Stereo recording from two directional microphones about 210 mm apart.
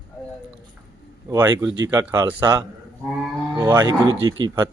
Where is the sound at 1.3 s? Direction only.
15° right (ahead or behind).